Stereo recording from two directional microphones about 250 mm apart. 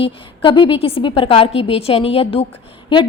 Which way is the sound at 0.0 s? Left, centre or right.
Centre.